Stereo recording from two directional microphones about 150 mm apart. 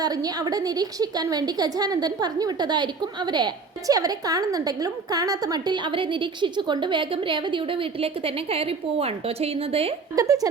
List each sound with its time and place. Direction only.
0.0 s a woman's voice: 25° right (ahead or behind); by 9.9 s 40° right (ahead or behind)
10.2 s a woman's voice: 25° right (ahead or behind)